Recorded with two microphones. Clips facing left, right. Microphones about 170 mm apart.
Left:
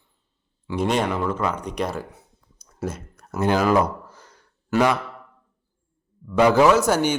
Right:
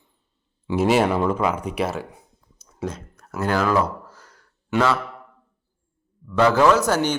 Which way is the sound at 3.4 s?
20° left (ahead or behind).